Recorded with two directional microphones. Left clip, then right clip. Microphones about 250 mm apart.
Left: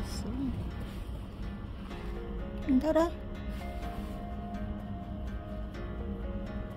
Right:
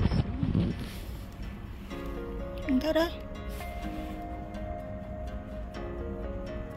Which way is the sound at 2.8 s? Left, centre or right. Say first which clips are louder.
Even; centre.